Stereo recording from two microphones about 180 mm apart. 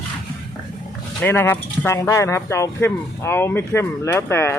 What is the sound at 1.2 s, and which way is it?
Speech, 10° left (ahead or behind).